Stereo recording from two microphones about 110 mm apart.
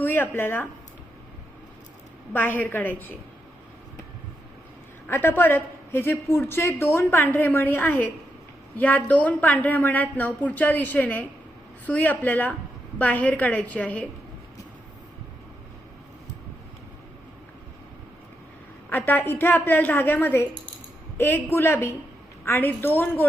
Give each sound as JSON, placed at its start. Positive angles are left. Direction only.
{"t": 0.0, "sound": "speech", "side_deg": 20}
{"t": 2.3, "sound": "speech", "side_deg": 20}
{"t": 5.0, "sound": "a woman's voice", "side_deg": 20}
{"t": 18.9, "sound": "a woman's voice", "side_deg": 20}